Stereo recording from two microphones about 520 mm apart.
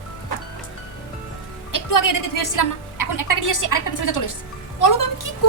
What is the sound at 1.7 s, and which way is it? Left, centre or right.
A woman's voice, left.